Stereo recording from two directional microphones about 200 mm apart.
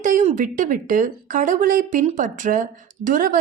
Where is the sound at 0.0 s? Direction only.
35° right (ahead or behind).